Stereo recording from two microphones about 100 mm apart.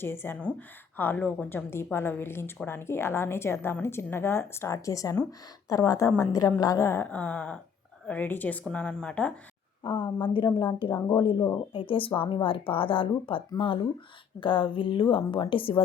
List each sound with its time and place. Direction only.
0.0 s a woman's voice: 20° left (ahead or behind)
7.0 s speech: 15° left (ahead or behind)
9.8 s a woman's voice: 60° left (ahead or behind); by 11.5 s 40° left (ahead or behind)
11.7 s a woman's voice: 60° left (ahead or behind)